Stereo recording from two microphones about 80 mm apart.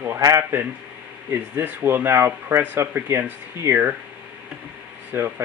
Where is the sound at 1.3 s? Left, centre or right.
Right.